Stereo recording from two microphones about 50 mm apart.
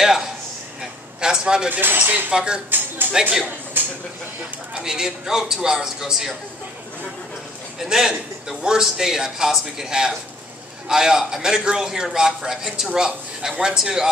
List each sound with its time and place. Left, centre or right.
0.0 s a man's voice: centre
1.7 s speech: right
2.3 s a man's voice: centre
3.8 s a sound: right
4.8 s a man's voice: centre
7.8 s a man's voice: centre